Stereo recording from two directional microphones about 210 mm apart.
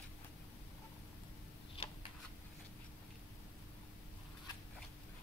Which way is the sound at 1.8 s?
25° left (ahead or behind).